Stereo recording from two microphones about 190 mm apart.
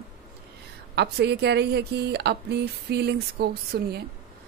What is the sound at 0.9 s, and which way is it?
A woman's voice, 60° right (ahead or behind).